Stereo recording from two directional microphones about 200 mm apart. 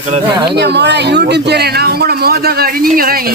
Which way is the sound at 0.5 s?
55° right (ahead or behind).